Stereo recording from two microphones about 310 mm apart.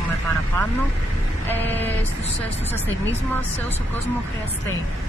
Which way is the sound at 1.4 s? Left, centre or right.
Centre.